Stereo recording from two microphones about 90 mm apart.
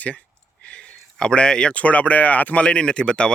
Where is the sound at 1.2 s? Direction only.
10° left (ahead or behind).